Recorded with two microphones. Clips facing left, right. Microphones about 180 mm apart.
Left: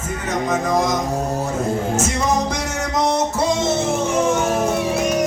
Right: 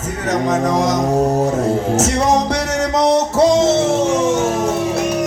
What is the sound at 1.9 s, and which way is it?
Music, 80° right.